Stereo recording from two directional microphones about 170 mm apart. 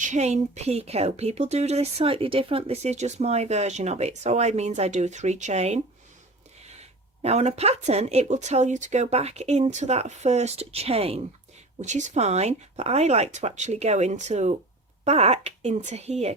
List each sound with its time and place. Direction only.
0.0 s speech: 45° right (ahead or behind)